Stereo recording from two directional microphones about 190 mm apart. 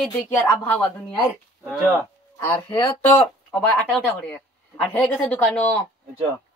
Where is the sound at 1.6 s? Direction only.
5° right (ahead or behind).